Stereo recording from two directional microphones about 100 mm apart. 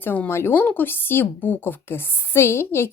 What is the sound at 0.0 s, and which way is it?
Speech, 20° left (ahead or behind).